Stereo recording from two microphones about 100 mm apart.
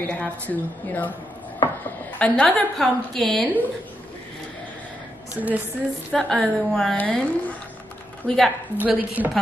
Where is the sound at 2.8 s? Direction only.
Centre (ahead or behind).